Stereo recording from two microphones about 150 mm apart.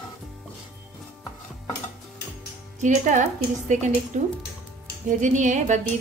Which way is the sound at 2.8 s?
55° right (ahead or behind).